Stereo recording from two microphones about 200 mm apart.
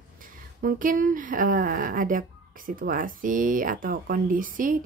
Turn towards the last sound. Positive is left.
turn(degrees=-45)  # may be behind; listen again after turning